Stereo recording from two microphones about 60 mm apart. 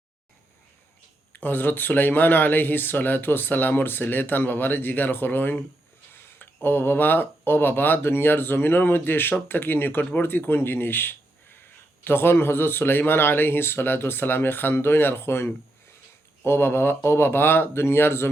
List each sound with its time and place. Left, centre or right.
1.3 s speech: left